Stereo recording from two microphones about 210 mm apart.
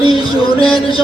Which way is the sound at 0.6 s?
25° left (ahead or behind).